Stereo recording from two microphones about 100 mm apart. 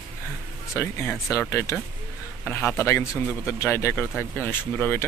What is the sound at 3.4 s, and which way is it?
Speech, 25° left (ahead or behind).